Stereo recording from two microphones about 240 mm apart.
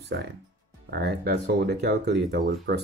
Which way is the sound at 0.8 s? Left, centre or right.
Right.